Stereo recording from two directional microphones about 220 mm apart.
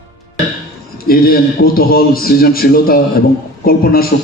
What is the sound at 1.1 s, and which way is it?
A man's voice, 40° left (ahead or behind).